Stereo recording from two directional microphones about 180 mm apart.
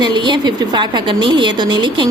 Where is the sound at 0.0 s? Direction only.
25° right (ahead or behind).